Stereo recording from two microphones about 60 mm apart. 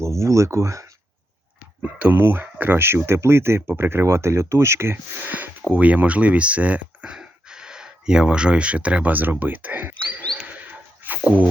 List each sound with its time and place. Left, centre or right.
0.0 s speech: right
1.8 s speech: right
2.1 s speech: right
5.2 s speech: right
10.4 s a sound: right